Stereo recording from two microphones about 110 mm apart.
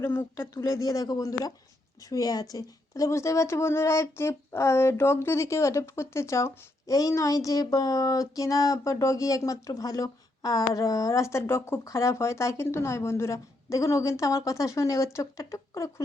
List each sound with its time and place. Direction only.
0.0 s a woman's voice: 20° left (ahead or behind)